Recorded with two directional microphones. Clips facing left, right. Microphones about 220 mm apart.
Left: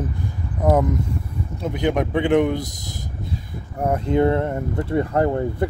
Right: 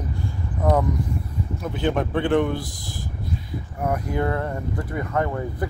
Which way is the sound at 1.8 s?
15° left (ahead or behind).